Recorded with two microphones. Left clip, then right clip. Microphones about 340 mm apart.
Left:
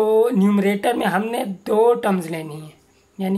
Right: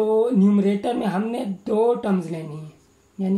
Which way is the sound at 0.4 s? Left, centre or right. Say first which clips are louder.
Left 2 dB; left.